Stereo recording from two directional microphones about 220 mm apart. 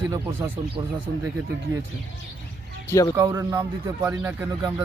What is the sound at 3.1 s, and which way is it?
Speech, 15° right (ahead or behind).